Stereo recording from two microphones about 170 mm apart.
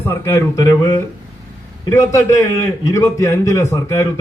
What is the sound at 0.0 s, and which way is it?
A man's voice, 15° left (ahead or behind).